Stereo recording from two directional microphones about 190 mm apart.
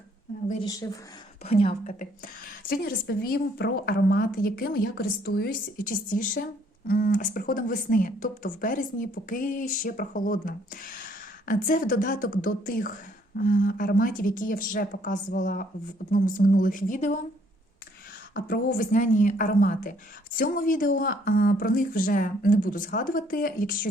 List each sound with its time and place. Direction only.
0.6 s a woman's voice: 20° left (ahead or behind)
1.5 s a woman's voice: 30° left (ahead or behind)
1.9 s a woman's voice: 50° left (ahead or behind)
18.3 s a woman's voice: 45° left (ahead or behind)